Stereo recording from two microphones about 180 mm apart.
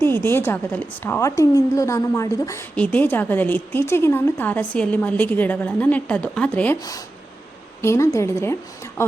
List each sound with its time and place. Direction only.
0.0 s a woman's voice: 10° left (ahead or behind)
6.7 s a woman's voice: 20° left (ahead or behind)